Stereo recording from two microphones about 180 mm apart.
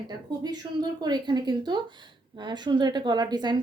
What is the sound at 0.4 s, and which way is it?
A woman's voice, 20° right (ahead or behind).